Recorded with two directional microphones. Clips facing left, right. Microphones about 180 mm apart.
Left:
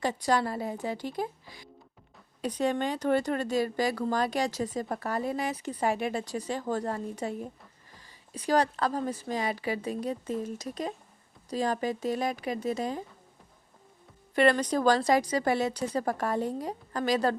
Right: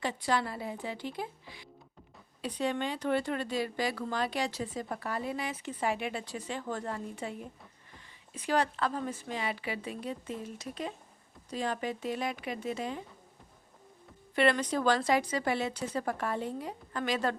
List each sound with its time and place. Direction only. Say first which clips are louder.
0.0 s speech: left 4 dB; 40° left (ahead or behind)
14.3 s speech: left 4 dB; 40° left (ahead or behind)